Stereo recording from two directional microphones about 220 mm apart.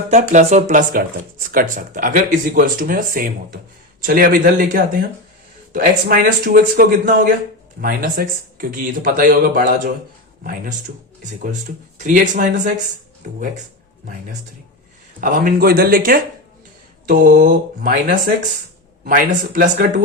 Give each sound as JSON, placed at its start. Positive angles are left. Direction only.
{"t": 0.1, "sound": "speech", "side_deg": -30}
{"t": 15.2, "sound": "speech", "side_deg": -40}